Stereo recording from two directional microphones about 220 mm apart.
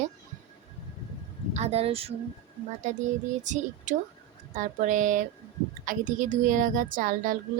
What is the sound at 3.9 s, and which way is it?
Speech, 35° right (ahead or behind).